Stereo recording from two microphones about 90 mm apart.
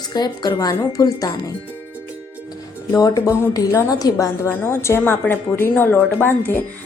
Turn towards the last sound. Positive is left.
turn(degrees=20)  # may be behind; listen again after turning